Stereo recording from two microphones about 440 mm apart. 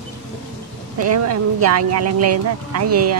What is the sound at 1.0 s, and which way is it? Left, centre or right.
Speech, right.